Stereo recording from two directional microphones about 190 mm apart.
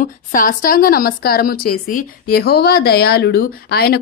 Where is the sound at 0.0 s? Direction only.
45° left (ahead or behind).